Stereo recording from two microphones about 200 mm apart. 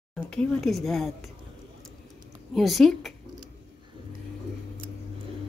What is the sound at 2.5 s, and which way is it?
Speech, centre (ahead or behind).